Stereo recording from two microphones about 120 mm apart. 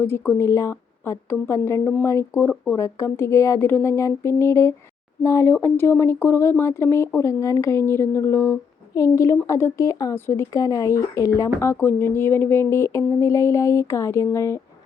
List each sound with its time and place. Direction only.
0.0 s speech: 20° left (ahead or behind)